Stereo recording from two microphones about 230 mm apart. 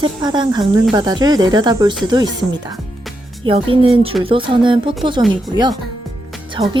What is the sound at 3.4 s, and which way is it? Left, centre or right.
Speech, right.